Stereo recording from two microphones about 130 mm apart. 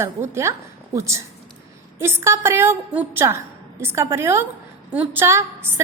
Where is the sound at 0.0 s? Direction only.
20° right (ahead or behind).